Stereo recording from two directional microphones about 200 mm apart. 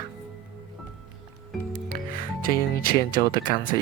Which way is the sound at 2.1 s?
45° left (ahead or behind).